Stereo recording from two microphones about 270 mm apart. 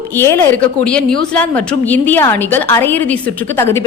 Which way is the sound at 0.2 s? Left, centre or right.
Centre.